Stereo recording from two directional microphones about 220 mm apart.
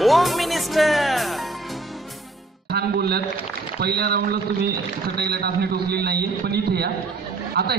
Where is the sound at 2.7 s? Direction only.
45° right (ahead or behind).